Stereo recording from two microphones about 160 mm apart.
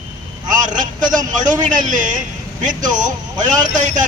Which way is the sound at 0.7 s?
55° right (ahead or behind).